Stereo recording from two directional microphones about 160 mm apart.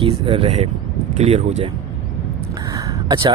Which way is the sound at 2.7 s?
30° right (ahead or behind).